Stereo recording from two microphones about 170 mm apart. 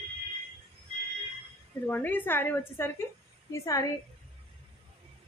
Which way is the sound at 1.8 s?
10° left (ahead or behind).